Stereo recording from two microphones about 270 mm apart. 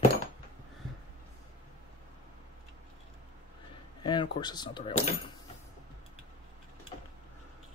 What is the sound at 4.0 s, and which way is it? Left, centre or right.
Speech, centre.